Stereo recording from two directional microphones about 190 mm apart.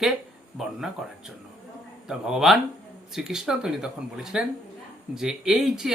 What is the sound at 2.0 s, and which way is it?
Speech, 5° right (ahead or behind).